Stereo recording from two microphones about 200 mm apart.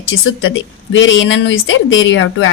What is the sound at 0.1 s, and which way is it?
Speech, 75° left (ahead or behind).